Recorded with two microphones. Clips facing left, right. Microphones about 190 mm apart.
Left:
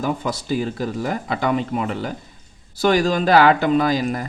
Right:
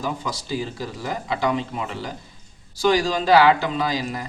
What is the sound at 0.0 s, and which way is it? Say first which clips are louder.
Speech: left 5 dB; 55° left (ahead or behind).